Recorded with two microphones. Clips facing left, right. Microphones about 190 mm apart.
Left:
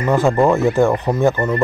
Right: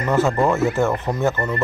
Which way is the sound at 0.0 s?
15° left (ahead or behind).